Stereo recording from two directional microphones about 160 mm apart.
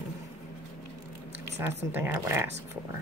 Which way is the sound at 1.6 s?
10° right (ahead or behind).